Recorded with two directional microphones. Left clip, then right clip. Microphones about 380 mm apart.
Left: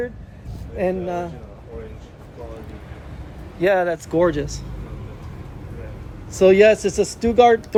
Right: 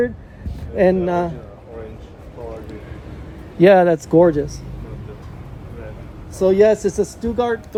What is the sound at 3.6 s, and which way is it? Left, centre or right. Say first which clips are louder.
Speech: right 7 dB; centre.